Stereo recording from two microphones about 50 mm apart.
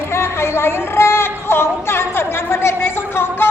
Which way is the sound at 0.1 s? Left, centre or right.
Left.